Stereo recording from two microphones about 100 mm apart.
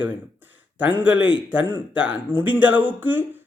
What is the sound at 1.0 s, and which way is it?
Speech, 15° right (ahead or behind).